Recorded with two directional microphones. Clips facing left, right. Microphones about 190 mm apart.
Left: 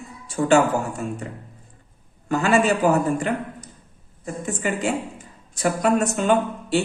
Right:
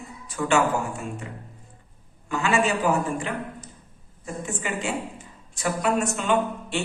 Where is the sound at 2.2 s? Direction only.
40° left (ahead or behind).